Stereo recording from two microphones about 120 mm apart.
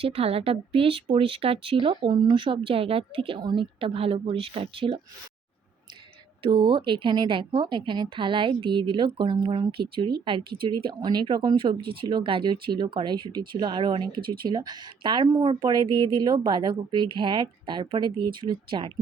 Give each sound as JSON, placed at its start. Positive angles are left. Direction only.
{"t": 0.0, "sound": "speech", "side_deg": -55}
{"t": 6.4, "sound": "speech", "side_deg": -40}